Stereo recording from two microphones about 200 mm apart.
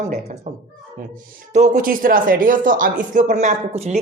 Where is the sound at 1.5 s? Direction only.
40° right (ahead or behind).